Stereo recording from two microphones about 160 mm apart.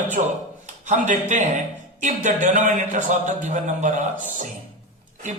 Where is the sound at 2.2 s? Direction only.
50° right (ahead or behind).